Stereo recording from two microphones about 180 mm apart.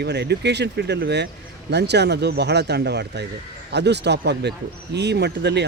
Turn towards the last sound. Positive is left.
turn(degrees=-70)  # may be behind; listen again after turning